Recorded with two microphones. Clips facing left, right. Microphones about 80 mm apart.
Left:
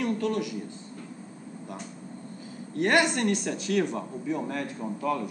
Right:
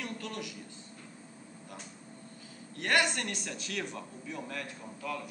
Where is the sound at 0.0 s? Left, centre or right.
Centre.